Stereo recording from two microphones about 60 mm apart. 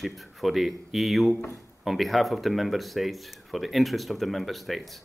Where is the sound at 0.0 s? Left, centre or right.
Centre.